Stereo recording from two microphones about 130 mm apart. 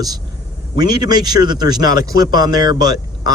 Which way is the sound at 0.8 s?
30° right (ahead or behind).